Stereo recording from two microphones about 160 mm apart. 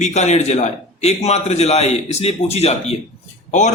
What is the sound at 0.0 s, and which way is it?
A man's voice, 45° left (ahead or behind).